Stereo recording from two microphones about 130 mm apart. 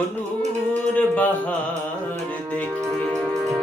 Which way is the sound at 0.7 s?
10° left (ahead or behind).